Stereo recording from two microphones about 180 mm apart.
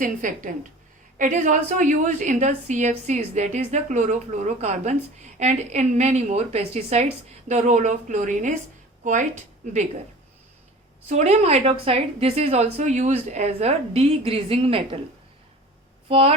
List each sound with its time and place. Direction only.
0.0 s a woman's voice: 45° right (ahead or behind)
11.0 s a woman's voice: 35° right (ahead or behind)
16.0 s speech: 35° right (ahead or behind)